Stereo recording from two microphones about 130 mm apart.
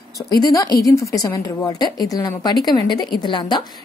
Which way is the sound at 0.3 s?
30° left (ahead or behind).